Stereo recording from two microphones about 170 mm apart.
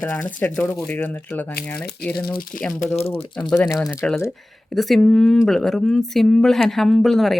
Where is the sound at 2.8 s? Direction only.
40° left (ahead or behind).